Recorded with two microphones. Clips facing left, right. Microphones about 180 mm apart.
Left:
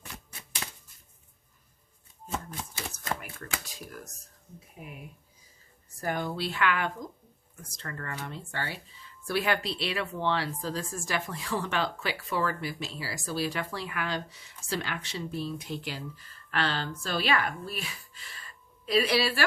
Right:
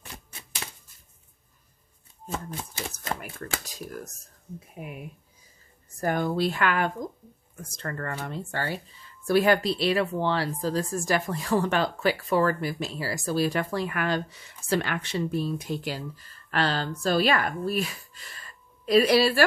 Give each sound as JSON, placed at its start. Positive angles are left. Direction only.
{"t": 3.2, "sound": "speech", "side_deg": -35}
{"t": 5.9, "sound": "speech", "side_deg": -45}